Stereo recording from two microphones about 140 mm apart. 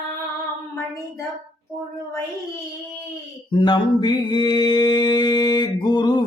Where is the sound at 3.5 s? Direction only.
35° left (ahead or behind).